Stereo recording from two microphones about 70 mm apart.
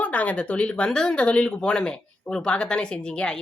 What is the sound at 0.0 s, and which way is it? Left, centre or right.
Speech, left.